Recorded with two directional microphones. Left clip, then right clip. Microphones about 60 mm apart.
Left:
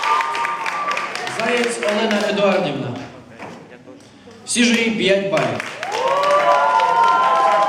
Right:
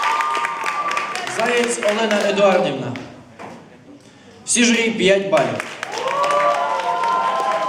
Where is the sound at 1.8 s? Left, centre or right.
Right.